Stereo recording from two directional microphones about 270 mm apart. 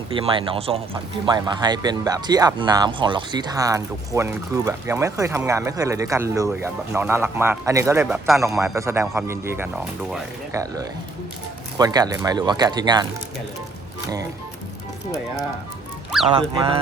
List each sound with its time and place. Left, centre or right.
0.1 s speech: centre
16.3 s speech: centre